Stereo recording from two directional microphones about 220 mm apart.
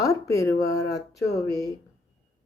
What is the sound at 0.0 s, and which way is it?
Speech, 15° left (ahead or behind).